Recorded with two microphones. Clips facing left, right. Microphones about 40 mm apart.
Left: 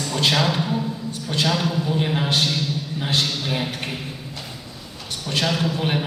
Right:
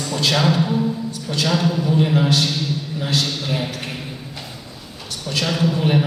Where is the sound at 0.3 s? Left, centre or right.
Centre.